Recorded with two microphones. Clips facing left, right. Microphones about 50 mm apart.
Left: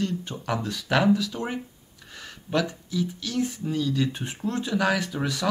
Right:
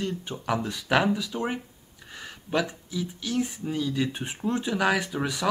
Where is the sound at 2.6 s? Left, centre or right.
Centre.